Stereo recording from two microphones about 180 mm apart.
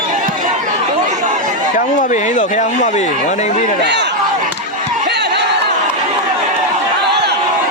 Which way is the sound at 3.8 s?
75° right (ahead or behind).